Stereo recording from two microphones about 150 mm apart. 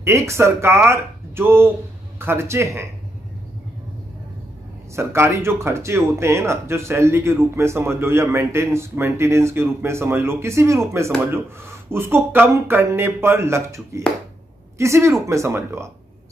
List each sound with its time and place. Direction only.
0.0 s speech: 20° right (ahead or behind)
4.9 s speech: 15° right (ahead or behind)
14.8 s speech: 20° right (ahead or behind)